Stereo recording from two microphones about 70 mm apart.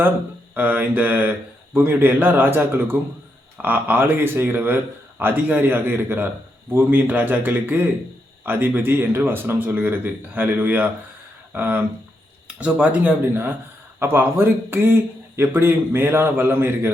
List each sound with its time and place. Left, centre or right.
0.5 s a man's voice: right